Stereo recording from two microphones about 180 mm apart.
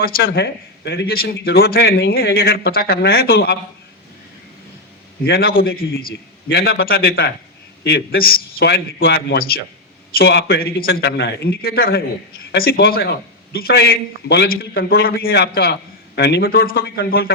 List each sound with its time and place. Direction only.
0.0 s a man's voice: 65° left (ahead or behind)
5.2 s a man's voice: 60° left (ahead or behind)